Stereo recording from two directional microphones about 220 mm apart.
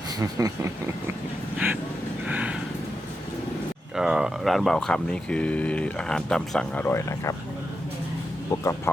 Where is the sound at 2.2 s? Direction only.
5° right (ahead or behind).